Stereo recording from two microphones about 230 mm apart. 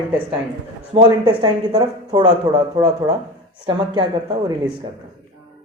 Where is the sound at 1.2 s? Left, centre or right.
Centre.